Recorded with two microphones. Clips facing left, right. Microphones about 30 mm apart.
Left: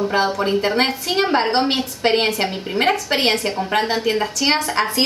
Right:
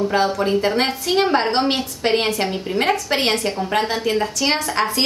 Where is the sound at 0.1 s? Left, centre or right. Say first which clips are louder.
Even; centre.